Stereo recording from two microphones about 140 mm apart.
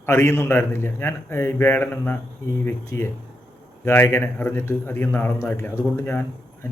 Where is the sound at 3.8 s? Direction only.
15° left (ahead or behind).